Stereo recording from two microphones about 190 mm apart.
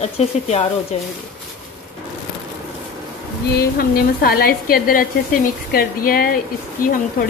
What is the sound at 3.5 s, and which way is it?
Speech, 50° left (ahead or behind).